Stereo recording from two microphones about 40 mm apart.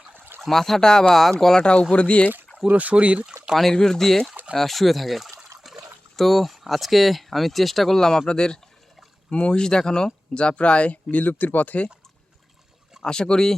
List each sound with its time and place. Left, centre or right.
0.3 s speech: centre
0.8 s speech: centre
1.6 s speech: left
2.7 s speech: right
3.2 s speech: centre
3.6 s speech: centre
5.7 s trickle: centre
6.1 s speech: centre; by 11.9 s left
13.0 s speech: centre